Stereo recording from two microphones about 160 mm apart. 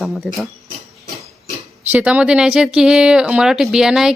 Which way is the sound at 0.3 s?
10° right (ahead or behind).